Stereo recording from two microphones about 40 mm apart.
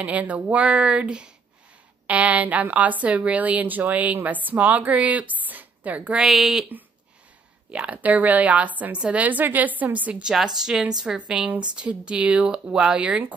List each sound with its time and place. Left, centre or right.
0.0 s speech: right
6.2 s speech: centre
7.7 s a woman's voice: right
10.3 s speech: centre
11.1 s speech: right